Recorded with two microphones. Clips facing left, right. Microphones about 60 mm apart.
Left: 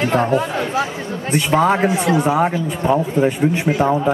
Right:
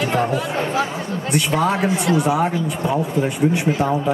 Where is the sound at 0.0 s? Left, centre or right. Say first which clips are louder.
Left 3 dB; left.